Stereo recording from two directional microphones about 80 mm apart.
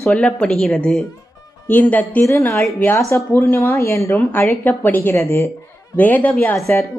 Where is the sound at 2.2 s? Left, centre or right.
Left.